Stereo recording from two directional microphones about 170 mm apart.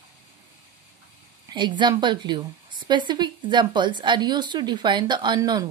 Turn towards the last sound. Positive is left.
turn(degrees=-25)  # may be behind; listen again after turning